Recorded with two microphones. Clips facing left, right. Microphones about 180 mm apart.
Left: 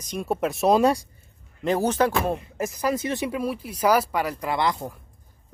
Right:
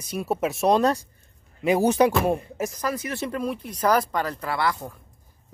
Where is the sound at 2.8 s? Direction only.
20° left (ahead or behind).